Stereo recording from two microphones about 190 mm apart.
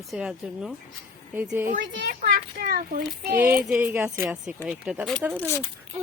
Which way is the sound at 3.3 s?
10° right (ahead or behind).